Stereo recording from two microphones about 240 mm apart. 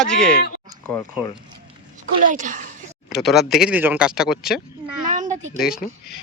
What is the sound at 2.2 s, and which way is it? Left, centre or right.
Speech, right.